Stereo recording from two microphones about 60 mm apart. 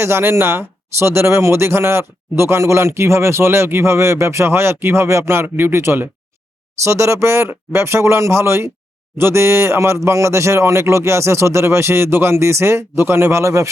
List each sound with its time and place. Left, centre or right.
0.0 s speech: right
6.8 s speech: right